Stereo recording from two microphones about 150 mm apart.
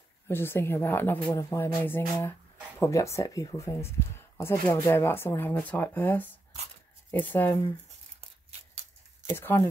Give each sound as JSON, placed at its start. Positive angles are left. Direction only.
{"t": 0.3, "sound": "speech", "side_deg": 15}
{"t": 9.2, "sound": "speech", "side_deg": 15}